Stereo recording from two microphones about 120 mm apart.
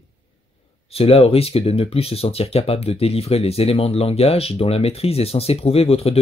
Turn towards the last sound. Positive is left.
turn(degrees=55)  # may be behind; listen again after turning